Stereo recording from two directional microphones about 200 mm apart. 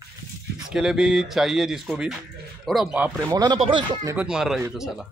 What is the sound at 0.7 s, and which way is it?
Speech, 5° right (ahead or behind).